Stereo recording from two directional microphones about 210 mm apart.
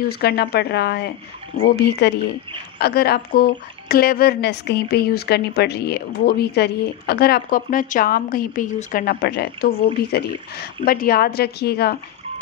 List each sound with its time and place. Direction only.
0.1 s speech: 50° left (ahead or behind)